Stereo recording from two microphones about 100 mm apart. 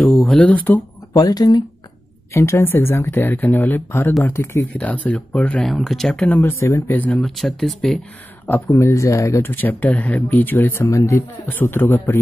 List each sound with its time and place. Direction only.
0.0 s speech: 5° left (ahead or behind)
1.1 s speech: 40° left (ahead or behind)
2.3 s speech: 25° left (ahead or behind)
4.7 s speech: 15° left (ahead or behind)
6.2 s speech: 20° left (ahead or behind)
7.1 s speech: 5° left (ahead or behind)
8.6 s speech: 30° left (ahead or behind)
9.5 s speech: 20° left (ahead or behind)